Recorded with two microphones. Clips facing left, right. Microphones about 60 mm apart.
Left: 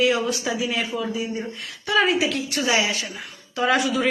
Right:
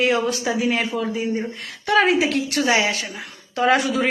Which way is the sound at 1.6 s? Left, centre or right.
Right.